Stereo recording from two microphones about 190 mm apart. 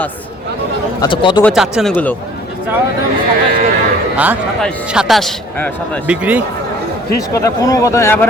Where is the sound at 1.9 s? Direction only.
10° left (ahead or behind).